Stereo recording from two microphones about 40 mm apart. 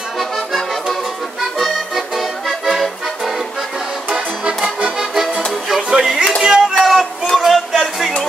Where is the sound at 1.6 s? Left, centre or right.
Centre.